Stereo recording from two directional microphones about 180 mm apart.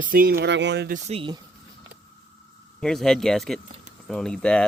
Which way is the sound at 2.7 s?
5° left (ahead or behind).